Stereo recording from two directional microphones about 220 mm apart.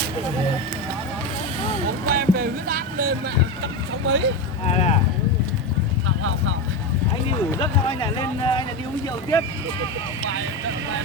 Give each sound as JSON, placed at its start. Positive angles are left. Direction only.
{"t": 2.0, "sound": "music", "side_deg": -45}
{"t": 4.0, "sound": "speech", "side_deg": -55}
{"t": 4.6, "sound": "speech", "side_deg": 30}
{"t": 6.1, "sound": "clip-clop", "side_deg": -65}
{"t": 7.6, "sound": "speech", "side_deg": 20}